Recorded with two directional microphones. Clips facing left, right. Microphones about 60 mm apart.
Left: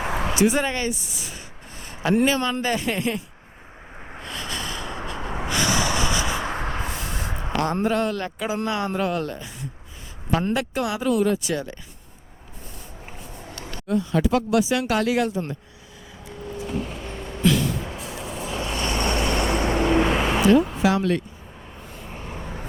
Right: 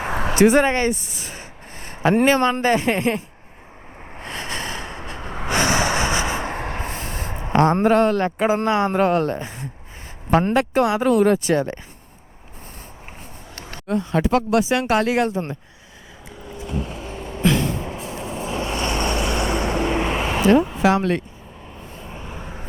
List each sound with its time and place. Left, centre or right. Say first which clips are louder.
0.0 s speech: right 4 dB; right
4.2 s snort: right 3 dB; right
5.0 s gasp: left 2 dB; right
5.5 s a sound: right 4 dB; right
10.3 s speech: right 6 dB; right
13.6 s speech: right 1 dB; right
17.0 s vehicle: right 1 dB; right
19.3 s vehicle: even; centre
19.8 s vehicle: left 2 dB; right
20.4 s speech: right 3 dB; right
21.8 s vehicle: right 2 dB; right